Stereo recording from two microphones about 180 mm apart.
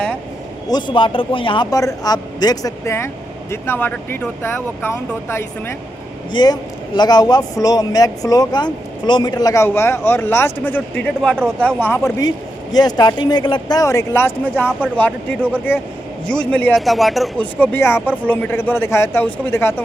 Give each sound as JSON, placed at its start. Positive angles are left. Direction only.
{"t": 0.7, "sound": "speech", "side_deg": 25}